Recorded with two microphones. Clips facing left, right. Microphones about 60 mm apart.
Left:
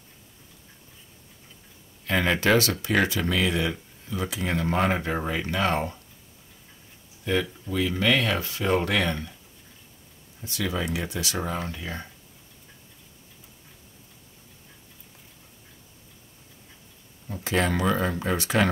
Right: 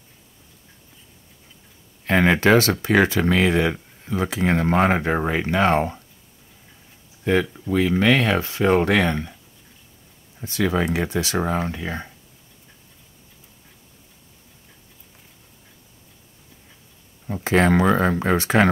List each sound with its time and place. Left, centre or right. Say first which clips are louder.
2.0 s speech: right 6 dB; right
3.2 s speech: right 6 dB; right
7.2 s speech: right 6 dB; right
10.4 s speech: right 7 dB; right
17.3 s speech: right 7 dB; right